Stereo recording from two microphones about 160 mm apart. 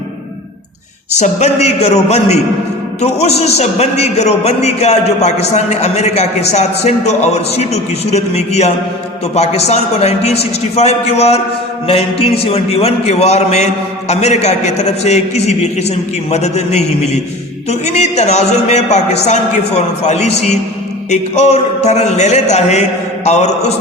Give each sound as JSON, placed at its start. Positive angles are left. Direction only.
{"t": 1.2, "sound": "a man's voice", "side_deg": 45}